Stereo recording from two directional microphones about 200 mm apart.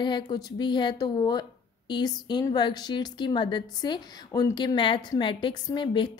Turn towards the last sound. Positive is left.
turn(degrees=20)  # may be behind; listen again after turning